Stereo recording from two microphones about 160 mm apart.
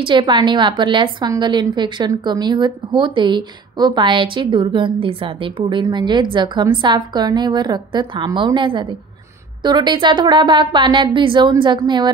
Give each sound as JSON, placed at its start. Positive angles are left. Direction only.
{"t": 0.0, "sound": "a woman's voice", "side_deg": -30}